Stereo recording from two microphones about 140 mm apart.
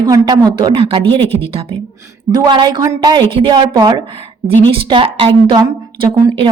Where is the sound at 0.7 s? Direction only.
40° right (ahead or behind).